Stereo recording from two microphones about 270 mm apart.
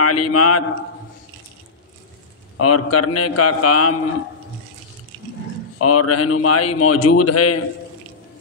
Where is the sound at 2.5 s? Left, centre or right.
Left.